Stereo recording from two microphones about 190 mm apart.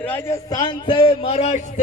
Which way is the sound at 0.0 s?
10° left (ahead or behind).